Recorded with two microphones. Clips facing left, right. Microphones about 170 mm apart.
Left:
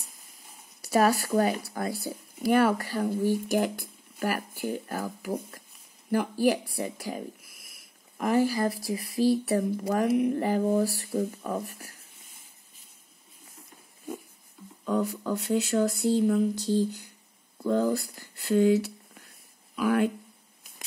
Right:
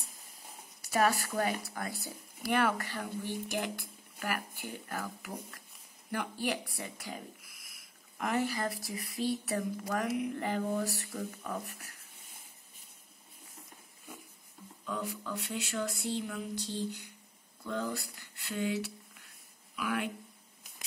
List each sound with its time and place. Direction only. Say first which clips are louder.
0.8 s speech: left 6 dB; 35° left (ahead or behind)
14.9 s speech: left 10 dB; 40° left (ahead or behind)